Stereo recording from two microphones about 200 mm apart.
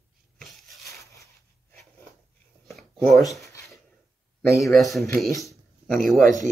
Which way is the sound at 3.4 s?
15° left (ahead or behind).